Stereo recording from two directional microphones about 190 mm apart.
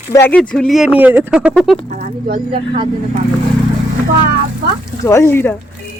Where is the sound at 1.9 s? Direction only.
40° right (ahead or behind).